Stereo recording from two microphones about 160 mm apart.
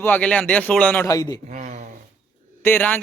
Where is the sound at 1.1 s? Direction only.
25° left (ahead or behind).